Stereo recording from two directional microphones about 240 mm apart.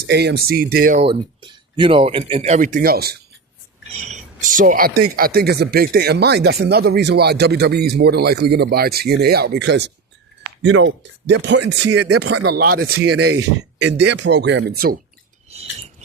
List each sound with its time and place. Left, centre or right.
0.1 s speech: right
1.0 s speech: centre; by 11.9 s right
11.9 s speech: right
12.5 s speech: right